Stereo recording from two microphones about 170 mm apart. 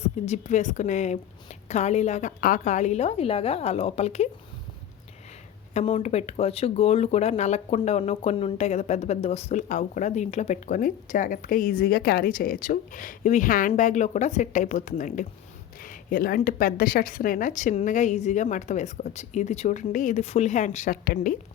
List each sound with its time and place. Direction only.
0.0 s a woman's voice: 40° left (ahead or behind)
5.7 s speech: 40° left (ahead or behind); by 21.3 s 60° left (ahead or behind)